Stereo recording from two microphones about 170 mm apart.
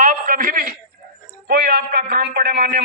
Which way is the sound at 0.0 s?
50° right (ahead or behind).